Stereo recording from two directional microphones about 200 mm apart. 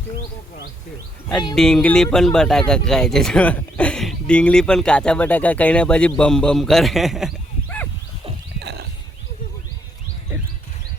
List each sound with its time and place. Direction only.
1.5 s speech: 5° left (ahead or behind)
8.5 s wild animals: 55° right (ahead or behind)